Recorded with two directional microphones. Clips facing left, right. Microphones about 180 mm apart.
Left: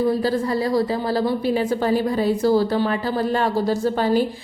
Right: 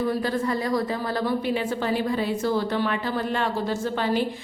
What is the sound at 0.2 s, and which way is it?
A woman's voice, 35° left (ahead or behind).